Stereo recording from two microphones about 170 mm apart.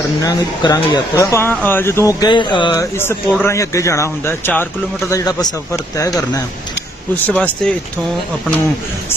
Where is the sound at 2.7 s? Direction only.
15° left (ahead or behind).